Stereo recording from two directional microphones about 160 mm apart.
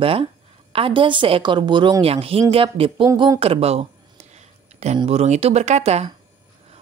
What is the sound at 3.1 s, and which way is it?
Speech, 20° right (ahead or behind).